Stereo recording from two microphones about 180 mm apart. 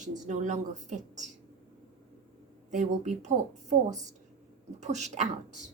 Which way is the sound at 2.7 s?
45° right (ahead or behind).